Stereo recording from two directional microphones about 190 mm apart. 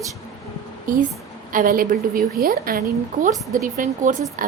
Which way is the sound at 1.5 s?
50° right (ahead or behind).